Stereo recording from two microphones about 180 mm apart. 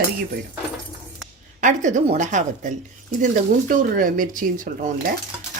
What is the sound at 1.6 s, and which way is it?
Stir, 45° right (ahead or behind).